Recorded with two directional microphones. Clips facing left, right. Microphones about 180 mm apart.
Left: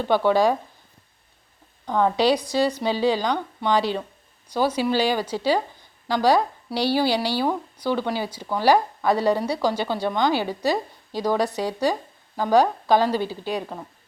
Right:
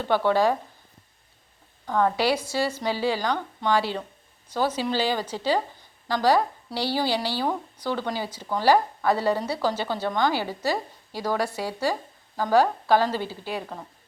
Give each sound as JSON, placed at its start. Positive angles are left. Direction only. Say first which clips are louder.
{"t": 0.0, "sound": "a woman's voice", "louder": "left 2 dB", "side_deg": 15}
{"t": 1.9, "sound": "a woman's voice", "louder": "left 3 dB", "side_deg": 15}